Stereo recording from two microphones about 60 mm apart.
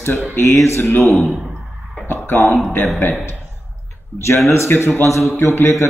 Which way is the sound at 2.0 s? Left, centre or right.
Left.